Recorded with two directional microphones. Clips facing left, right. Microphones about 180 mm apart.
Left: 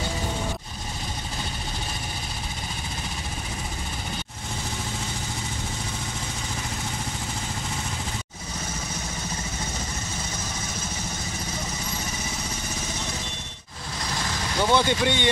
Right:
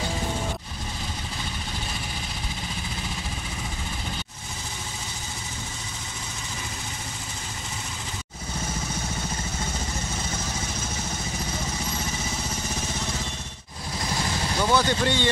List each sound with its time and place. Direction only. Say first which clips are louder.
14.6 s speech: left 1 dB; 25° left (ahead or behind)